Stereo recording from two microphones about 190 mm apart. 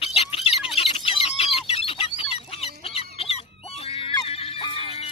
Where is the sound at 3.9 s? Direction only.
30° left (ahead or behind).